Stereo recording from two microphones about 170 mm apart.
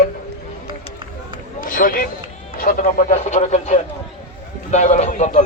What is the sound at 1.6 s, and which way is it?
Speech, 50° left (ahead or behind).